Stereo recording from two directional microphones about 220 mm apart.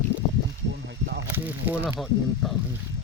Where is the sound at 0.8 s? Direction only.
50° right (ahead or behind).